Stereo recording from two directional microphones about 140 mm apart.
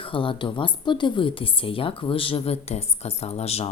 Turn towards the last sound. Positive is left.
turn(degrees=45)  # may be behind; listen again after turning